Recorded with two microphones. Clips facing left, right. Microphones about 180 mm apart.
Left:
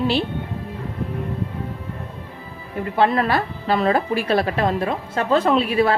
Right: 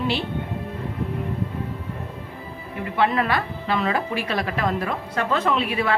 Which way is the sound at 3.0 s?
35° left (ahead or behind).